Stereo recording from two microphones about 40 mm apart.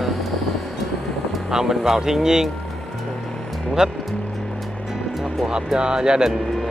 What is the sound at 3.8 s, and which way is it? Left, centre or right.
Speech, centre.